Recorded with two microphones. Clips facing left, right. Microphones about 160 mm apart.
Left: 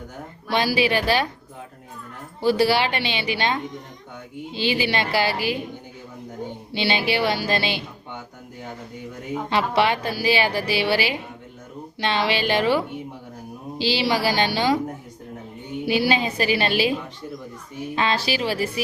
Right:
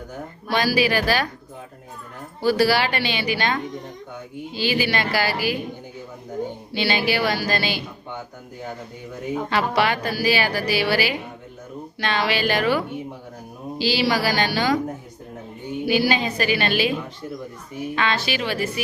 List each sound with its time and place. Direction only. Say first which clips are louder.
0.5 s a woman's voice: even; 25° left (ahead or behind)
2.4 s a woman's voice: even; 25° left (ahead or behind)
6.7 s a woman's voice: even; 25° left (ahead or behind)
9.5 s a woman's voice: left 1 dB; 25° left (ahead or behind)
15.9 s a woman's voice: even; 30° left (ahead or behind)
17.9 s speech: left 1 dB; 30° left (ahead or behind)